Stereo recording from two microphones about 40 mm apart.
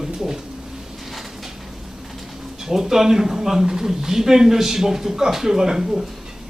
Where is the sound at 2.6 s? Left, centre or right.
Centre.